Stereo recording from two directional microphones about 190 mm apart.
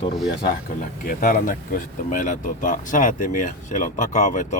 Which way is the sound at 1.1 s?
45° left (ahead or behind).